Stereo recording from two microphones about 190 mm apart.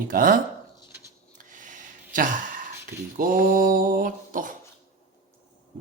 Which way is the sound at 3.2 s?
45° right (ahead or behind).